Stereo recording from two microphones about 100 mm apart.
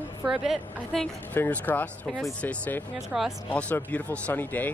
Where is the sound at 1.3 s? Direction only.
15° left (ahead or behind).